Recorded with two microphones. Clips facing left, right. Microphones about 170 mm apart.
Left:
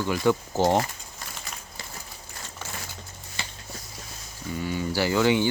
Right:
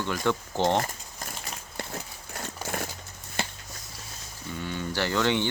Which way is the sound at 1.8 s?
55° right (ahead or behind).